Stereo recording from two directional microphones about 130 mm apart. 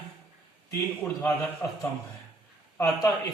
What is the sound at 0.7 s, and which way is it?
Speech, 20° left (ahead or behind).